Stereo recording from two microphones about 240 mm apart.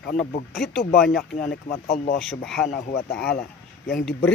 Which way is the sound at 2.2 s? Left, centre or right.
Centre.